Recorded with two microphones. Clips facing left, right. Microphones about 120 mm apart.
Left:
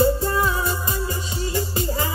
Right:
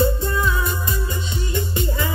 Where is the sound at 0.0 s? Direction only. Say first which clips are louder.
Left 1 dB; 35° left (ahead or behind).